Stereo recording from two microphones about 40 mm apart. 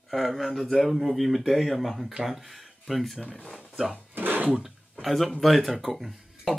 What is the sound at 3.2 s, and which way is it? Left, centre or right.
Speech, left.